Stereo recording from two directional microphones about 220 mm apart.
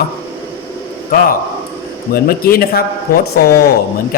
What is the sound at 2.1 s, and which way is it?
A man's voice, 40° left (ahead or behind).